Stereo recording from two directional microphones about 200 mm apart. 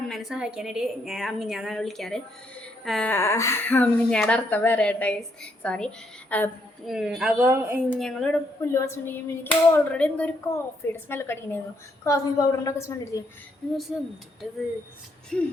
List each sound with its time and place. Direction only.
0.1 s a woman's voice: centre (ahead or behind)
7.4 s a woman's voice: 15° right (ahead or behind)
7.9 s a sound: centre (ahead or behind)
13.9 s a woman's voice: centre (ahead or behind)